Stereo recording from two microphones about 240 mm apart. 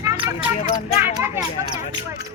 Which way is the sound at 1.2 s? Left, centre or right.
Centre.